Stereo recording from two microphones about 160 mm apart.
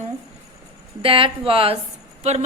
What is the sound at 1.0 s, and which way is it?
Speech, 35° right (ahead or behind).